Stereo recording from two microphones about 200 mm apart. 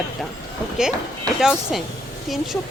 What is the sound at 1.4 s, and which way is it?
Speech, 5° right (ahead or behind).